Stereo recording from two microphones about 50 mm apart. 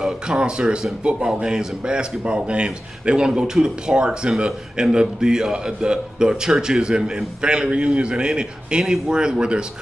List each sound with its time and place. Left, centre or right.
0.0 s a man's voice: centre